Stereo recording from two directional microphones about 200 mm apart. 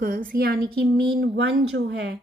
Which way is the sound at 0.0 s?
45° right (ahead or behind).